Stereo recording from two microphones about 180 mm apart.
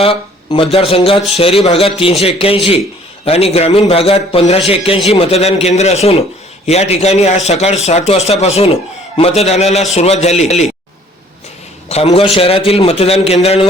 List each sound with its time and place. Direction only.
0.0 s speech: 30° left (ahead or behind)
11.9 s speech: 35° left (ahead or behind)